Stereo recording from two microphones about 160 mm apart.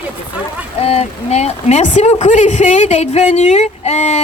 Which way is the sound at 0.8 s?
40° left (ahead or behind).